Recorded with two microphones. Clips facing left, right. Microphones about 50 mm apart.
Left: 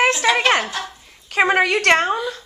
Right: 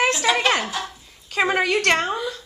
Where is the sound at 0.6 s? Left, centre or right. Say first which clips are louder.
Left 1 dB; centre.